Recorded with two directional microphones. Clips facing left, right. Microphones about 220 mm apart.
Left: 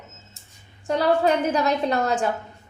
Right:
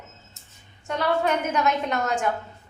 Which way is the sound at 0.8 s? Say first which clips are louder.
Left 4 dB; 35° left (ahead or behind).